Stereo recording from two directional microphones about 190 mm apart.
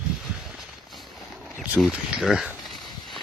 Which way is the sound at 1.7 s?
5° right (ahead or behind).